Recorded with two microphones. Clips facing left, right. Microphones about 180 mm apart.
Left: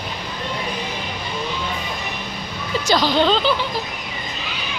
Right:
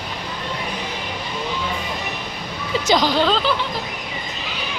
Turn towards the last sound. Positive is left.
turn(degrees=0)  # may be behind; listen again after turning